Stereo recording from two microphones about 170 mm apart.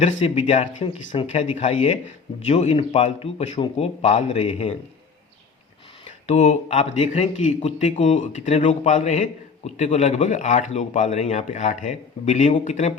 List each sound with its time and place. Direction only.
0.2 s speech: 40° left (ahead or behind)
0.9 s speech: 30° left (ahead or behind)
1.3 s speech: 40° left (ahead or behind)
6.1 s speech: 40° left (ahead or behind)